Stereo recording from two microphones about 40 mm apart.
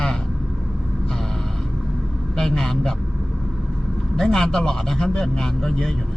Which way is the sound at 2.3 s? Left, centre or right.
Centre.